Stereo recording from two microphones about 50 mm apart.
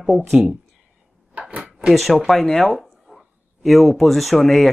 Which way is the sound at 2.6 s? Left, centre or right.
Centre.